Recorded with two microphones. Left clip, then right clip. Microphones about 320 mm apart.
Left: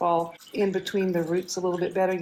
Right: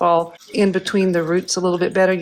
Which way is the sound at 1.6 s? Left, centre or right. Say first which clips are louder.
Right 7 dB; right.